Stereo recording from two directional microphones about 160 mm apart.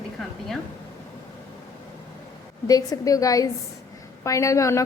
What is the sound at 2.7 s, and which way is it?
A woman's voice, 20° left (ahead or behind).